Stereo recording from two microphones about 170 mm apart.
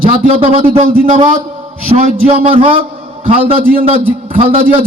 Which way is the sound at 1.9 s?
35° right (ahead or behind).